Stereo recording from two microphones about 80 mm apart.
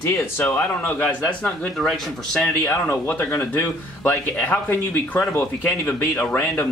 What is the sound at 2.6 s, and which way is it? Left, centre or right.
Speech, left.